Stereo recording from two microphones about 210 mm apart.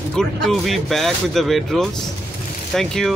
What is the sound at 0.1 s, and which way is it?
Speech, centre (ahead or behind).